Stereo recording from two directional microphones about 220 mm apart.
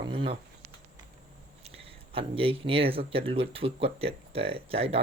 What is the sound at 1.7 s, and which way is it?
Speech, 25° right (ahead or behind).